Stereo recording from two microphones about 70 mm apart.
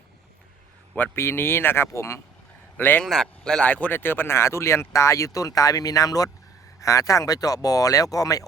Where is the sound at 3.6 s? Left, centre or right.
Left.